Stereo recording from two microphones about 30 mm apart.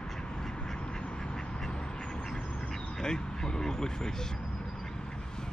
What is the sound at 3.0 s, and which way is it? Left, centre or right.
Speech, left.